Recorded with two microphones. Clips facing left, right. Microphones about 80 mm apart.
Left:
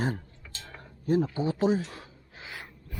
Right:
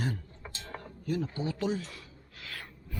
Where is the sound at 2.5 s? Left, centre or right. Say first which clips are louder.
Left 1 dB; centre.